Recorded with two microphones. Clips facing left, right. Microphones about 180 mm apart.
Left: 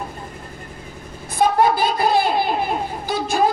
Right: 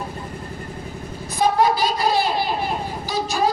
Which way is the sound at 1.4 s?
55° left (ahead or behind).